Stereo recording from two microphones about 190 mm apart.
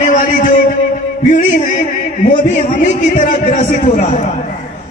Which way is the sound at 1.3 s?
40° left (ahead or behind).